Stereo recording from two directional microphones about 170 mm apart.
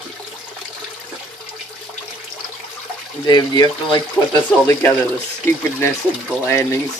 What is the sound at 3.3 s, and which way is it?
Speech, 25° left (ahead or behind).